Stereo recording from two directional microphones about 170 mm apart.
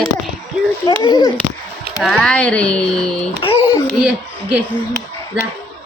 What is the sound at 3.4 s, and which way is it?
Speech, 30° left (ahead or behind).